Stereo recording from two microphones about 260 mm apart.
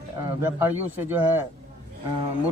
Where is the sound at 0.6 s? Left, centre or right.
Centre.